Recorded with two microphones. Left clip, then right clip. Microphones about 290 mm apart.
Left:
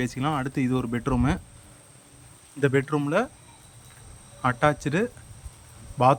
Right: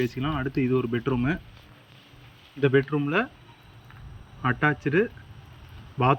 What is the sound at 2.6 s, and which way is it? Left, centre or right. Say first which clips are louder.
Speech: right 1 dB; centre.